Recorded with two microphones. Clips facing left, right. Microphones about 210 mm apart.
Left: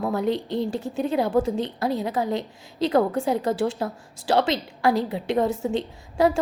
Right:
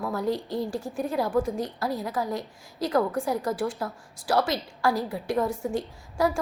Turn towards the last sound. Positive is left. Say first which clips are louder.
# left 5 dB
turn(degrees=20)  # may be behind; listen again after turning